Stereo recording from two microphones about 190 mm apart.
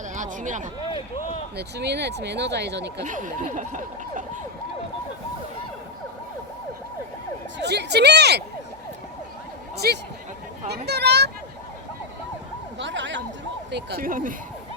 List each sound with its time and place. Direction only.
0.1 s a sound: 40° right (ahead or behind)
1.5 s speech: 60° right (ahead or behind)
3.0 s speech: 40° right (ahead or behind)
7.6 s speech: 65° right (ahead or behind)
9.7 s speech: 60° right (ahead or behind)
12.8 s speech: 70° right (ahead or behind)
13.7 s speech: 60° right (ahead or behind)